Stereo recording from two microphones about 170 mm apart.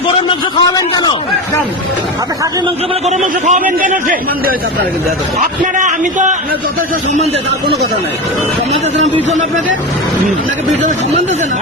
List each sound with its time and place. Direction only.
0.3 s speech: 25° left (ahead or behind)
3.4 s a man's voice: 45° right (ahead or behind)
5.4 s a man's voice: 50° right (ahead or behind)